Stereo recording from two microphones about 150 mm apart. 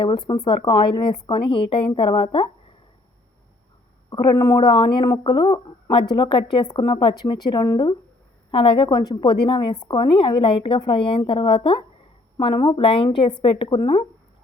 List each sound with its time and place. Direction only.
0.0 s a woman's voice: 30° left (ahead or behind)
4.1 s a woman's voice: 30° left (ahead or behind)